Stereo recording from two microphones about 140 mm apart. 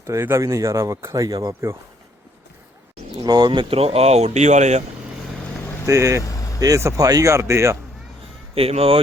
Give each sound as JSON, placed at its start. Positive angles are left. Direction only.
{"t": 0.0, "sound": "speech", "side_deg": -20}
{"t": 3.2, "sound": "speech", "side_deg": -30}
{"t": 5.8, "sound": "speech", "side_deg": -20}
{"t": 6.2, "sound": "vehicle", "side_deg": 25}
{"t": 6.6, "sound": "speech", "side_deg": -25}
{"t": 8.5, "sound": "speech", "side_deg": -45}